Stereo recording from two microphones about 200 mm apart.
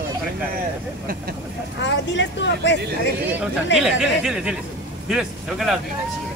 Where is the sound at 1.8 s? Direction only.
60° left (ahead or behind).